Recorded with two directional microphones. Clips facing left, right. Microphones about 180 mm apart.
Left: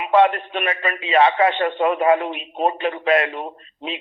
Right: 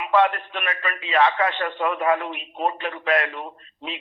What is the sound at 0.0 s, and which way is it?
A man's voice, 25° left (ahead or behind).